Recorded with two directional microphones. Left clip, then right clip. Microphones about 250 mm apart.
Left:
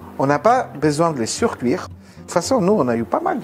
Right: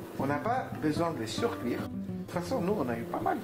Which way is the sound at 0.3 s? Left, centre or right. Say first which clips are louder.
Left 16 dB; left.